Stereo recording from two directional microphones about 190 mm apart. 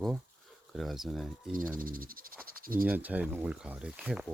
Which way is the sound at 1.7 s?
50° right (ahead or behind).